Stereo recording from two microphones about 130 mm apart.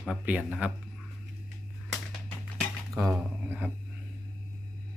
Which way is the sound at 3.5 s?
15° right (ahead or behind).